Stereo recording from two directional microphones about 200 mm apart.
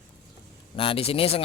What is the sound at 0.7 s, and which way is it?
Speech, 25° left (ahead or behind).